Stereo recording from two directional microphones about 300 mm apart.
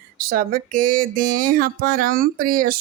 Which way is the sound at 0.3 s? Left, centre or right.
Right.